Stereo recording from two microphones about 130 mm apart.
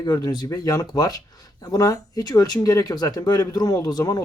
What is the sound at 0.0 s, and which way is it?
Speech, 30° left (ahead or behind).